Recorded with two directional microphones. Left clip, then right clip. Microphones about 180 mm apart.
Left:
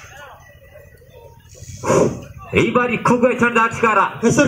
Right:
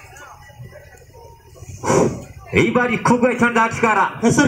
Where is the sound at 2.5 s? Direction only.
15° right (ahead or behind).